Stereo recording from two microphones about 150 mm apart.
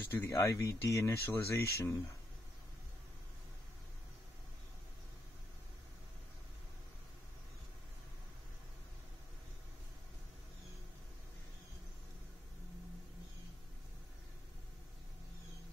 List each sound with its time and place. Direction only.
0.1 s speech: 15° left (ahead or behind)